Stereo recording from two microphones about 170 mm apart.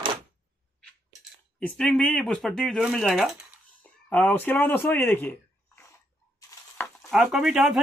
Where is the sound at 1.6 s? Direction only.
5° left (ahead or behind).